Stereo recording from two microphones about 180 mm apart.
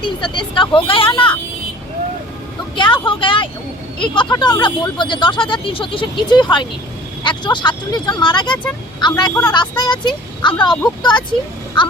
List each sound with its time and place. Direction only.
0.0 s speech: 25° left (ahead or behind)
2.7 s vehicle: 25° left (ahead or behind)
4.0 s speech: 25° left (ahead or behind)